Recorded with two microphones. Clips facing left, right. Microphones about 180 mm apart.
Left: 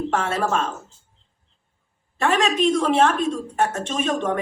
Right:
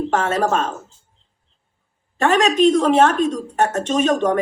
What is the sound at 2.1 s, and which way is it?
Speech, 40° right (ahead or behind).